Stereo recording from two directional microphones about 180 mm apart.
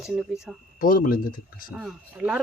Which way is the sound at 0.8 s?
50° left (ahead or behind).